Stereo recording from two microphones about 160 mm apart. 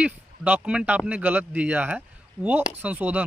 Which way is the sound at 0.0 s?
10° right (ahead or behind).